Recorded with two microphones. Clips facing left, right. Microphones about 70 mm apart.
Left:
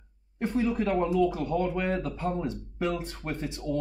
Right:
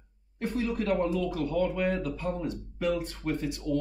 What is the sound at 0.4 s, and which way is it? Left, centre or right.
Speech, left.